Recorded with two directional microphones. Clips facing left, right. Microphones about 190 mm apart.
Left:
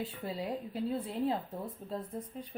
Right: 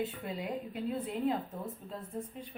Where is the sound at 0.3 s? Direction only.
35° left (ahead or behind).